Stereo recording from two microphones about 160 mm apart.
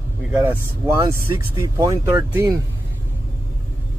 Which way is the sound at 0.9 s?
25° right (ahead or behind).